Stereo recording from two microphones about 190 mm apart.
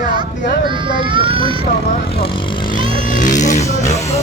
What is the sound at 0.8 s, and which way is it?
Speech, 25° right (ahead or behind).